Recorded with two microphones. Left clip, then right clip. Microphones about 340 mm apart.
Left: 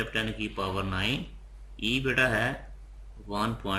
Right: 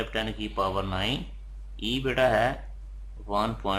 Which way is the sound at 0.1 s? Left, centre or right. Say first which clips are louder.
Even; centre.